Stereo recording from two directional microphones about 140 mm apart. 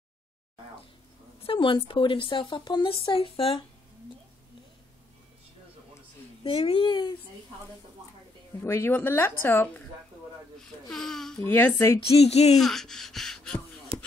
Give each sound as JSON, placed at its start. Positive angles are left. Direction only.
{"t": 1.4, "sound": "a woman's voice", "side_deg": 40}
{"t": 6.4, "sound": "a woman's voice", "side_deg": 40}
{"t": 8.5, "sound": "speech", "side_deg": 15}
{"t": 10.9, "sound": "speech", "side_deg": 0}
{"t": 11.4, "sound": "speech", "side_deg": 15}
{"t": 12.1, "sound": "speech", "side_deg": 50}
{"t": 12.5, "sound": "speech", "side_deg": 5}